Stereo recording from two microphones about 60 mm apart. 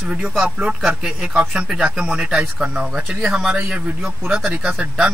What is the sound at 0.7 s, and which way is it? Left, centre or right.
A man's voice, centre.